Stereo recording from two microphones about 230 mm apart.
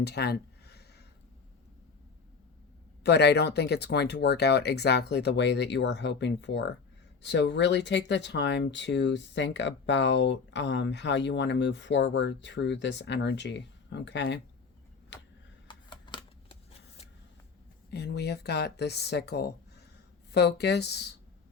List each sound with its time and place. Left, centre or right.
0.0 s a sound: left
3.0 s speech: left
15.6 s shuffling cards: centre
17.9 s speech: left